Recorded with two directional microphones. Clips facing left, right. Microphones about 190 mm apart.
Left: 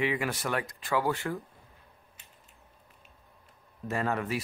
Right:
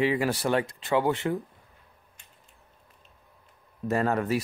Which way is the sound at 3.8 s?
40° right (ahead or behind).